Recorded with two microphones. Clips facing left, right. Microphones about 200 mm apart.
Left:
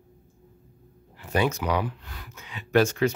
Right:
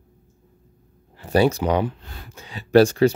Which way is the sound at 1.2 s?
35° right (ahead or behind).